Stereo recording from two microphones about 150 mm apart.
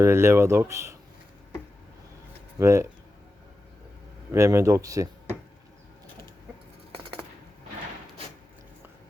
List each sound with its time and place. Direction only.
0.0 s speech: 15° right (ahead or behind)
2.6 s speech: 20° right (ahead or behind)
4.3 s speech: 20° right (ahead or behind)